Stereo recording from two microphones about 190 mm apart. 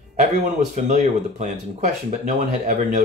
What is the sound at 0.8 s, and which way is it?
Speech, 40° right (ahead or behind).